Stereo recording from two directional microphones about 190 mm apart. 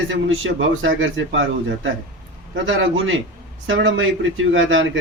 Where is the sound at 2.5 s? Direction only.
80° right.